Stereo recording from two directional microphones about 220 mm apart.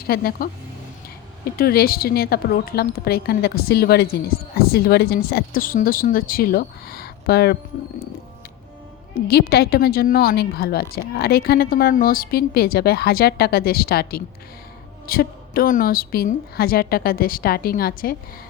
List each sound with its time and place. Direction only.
0.1 s a woman's voice: 45° left (ahead or behind)
1.5 s a woman's voice: 45° left (ahead or behind)
9.1 s a woman's voice: 45° left (ahead or behind)